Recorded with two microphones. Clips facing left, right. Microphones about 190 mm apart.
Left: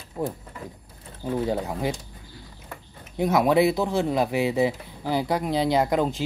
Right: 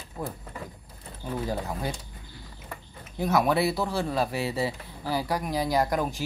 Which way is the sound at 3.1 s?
20° left (ahead or behind).